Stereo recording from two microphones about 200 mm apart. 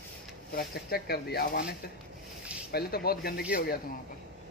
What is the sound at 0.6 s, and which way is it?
Speech, 50° left (ahead or behind).